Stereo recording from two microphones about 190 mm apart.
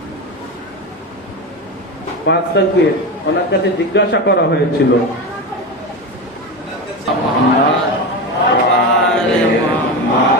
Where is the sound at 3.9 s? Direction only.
65° left (ahead or behind).